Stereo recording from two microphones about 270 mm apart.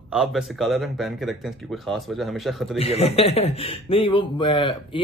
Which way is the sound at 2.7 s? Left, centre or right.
Left.